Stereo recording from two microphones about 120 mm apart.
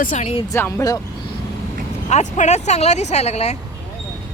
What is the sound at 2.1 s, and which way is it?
Speech, 75° left (ahead or behind).